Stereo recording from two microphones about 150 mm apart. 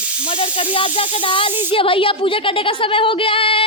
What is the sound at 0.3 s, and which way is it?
A woman's voice, 35° left (ahead or behind).